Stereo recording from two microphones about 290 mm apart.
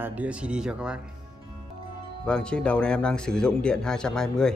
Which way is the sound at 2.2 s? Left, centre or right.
Centre.